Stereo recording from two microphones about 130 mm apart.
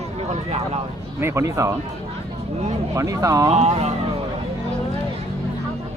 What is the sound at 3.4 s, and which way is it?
Speech, 55° right (ahead or behind).